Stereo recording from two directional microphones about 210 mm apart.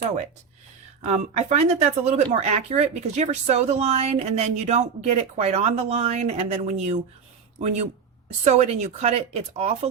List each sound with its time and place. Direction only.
1.0 s speech: 35° right (ahead or behind)